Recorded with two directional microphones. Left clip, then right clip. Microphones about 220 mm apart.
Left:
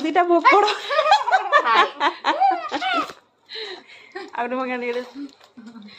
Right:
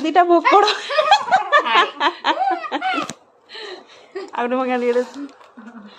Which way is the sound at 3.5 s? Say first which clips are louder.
Even; 25° right (ahead or behind).